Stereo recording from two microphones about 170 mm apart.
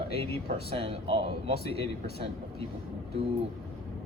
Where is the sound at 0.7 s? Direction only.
35° right (ahead or behind).